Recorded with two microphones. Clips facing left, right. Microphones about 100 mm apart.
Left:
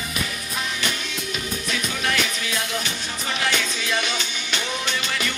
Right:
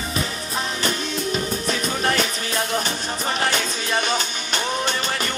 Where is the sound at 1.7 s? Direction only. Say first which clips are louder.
Right 3 dB; 40° right (ahead or behind).